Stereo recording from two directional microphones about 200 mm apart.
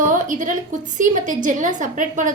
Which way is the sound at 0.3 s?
40° right (ahead or behind).